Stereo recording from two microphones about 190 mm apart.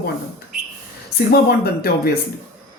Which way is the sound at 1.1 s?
55° left (ahead or behind).